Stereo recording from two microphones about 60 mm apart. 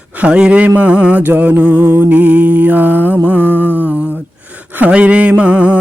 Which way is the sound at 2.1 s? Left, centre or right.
Right.